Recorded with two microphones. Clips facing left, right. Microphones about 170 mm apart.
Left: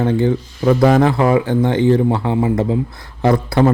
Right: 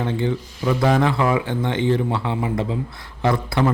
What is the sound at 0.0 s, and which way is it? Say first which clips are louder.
A man's voice: left 7 dB; 40° left (ahead or behind).